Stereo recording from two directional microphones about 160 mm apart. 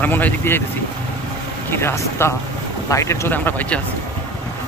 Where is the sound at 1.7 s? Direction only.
15° left (ahead or behind).